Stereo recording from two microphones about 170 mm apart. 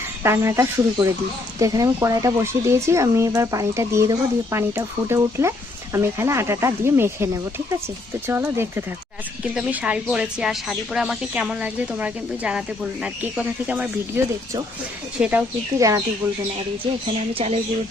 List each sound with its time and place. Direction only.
0.2 s speech: 15° right (ahead or behind)
8.3 s speech: 15° right (ahead or behind)
15.2 s speech: 5° right (ahead or behind)
17.3 s speech: 35° right (ahead or behind)